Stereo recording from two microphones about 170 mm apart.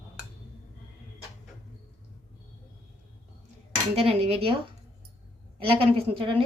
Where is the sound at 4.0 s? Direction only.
35° right (ahead or behind).